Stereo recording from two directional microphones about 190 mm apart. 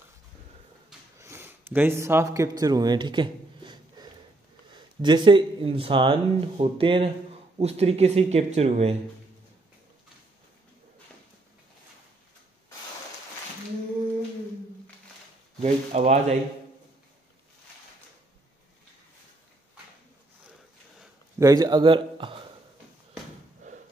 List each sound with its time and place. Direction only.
1.2 s a sound: 10° right (ahead or behind)
4.7 s speech: 25° right (ahead or behind)
15.6 s speech: 35° right (ahead or behind)
21.4 s speech: 20° right (ahead or behind)